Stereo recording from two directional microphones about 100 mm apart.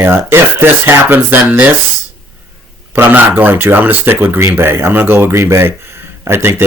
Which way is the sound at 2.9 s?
20° right (ahead or behind).